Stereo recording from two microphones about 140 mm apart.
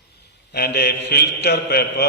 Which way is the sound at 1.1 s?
90° left.